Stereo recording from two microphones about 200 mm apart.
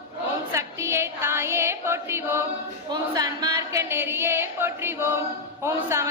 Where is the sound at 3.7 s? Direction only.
15° right (ahead or behind).